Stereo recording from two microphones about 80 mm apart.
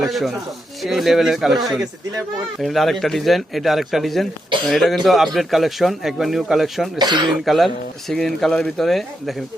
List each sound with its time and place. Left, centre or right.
0.0 s a man's voice: centre
2.6 s a man's voice: centre
7.0 s speech: right
7.4 s a man's voice: centre